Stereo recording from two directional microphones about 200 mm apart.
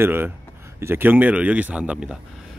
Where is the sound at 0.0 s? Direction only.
10° right (ahead or behind).